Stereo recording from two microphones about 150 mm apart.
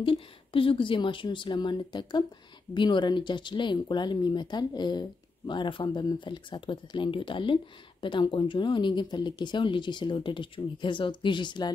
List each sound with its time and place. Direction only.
0.0 s speech: 35° left (ahead or behind)